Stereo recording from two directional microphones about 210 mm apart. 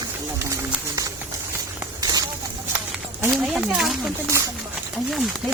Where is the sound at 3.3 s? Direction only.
5° right (ahead or behind).